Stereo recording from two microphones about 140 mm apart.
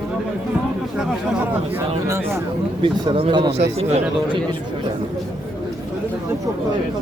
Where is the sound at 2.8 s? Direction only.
35° right (ahead or behind).